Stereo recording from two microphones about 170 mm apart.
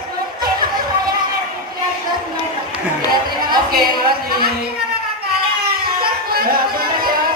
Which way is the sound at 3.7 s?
60° right (ahead or behind).